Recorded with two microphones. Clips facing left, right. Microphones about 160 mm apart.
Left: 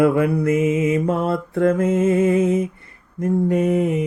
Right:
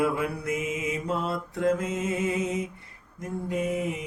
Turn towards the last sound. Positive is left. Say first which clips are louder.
# left 10 dB
turn(degrees=60)  # may be behind; listen again after turning